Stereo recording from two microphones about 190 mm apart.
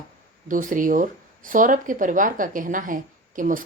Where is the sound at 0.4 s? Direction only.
45° right (ahead or behind).